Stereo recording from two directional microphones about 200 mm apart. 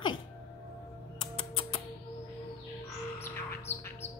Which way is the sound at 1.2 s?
25° left (ahead or behind).